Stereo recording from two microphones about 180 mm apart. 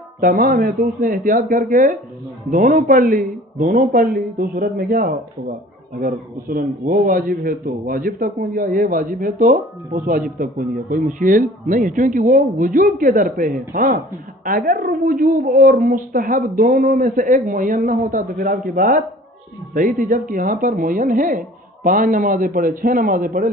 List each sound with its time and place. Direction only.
0.2 s a man's voice: 50° right (ahead or behind)